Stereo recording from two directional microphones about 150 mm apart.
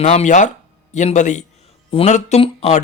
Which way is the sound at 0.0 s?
50° left (ahead or behind).